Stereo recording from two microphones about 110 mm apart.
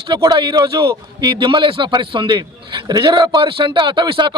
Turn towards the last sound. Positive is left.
turn(degrees=-45)  # may be behind; listen again after turning